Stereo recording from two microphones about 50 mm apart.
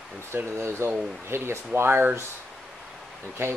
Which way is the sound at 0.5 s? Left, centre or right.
Right.